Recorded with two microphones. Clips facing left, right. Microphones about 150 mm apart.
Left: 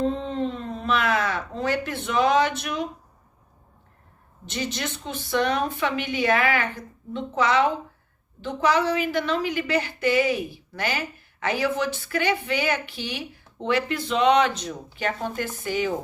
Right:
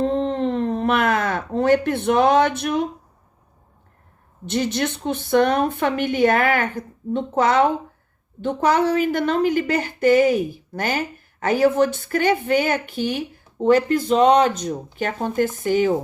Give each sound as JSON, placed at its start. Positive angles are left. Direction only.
{"t": 0.0, "sound": "speech", "side_deg": -65}
{"t": 4.4, "sound": "a woman's voice", "side_deg": -55}